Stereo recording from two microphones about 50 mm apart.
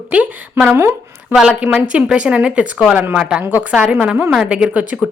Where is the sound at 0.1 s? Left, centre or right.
Right.